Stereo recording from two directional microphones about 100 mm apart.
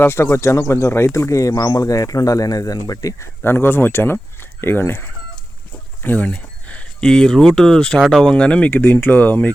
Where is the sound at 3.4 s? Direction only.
20° left (ahead or behind).